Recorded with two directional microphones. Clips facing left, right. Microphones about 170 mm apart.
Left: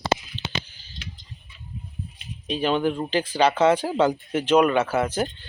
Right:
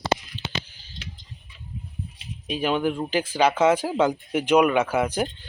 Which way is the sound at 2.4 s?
10° right (ahead or behind).